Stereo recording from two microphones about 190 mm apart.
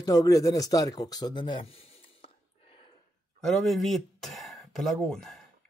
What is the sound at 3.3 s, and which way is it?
Speech, centre (ahead or behind).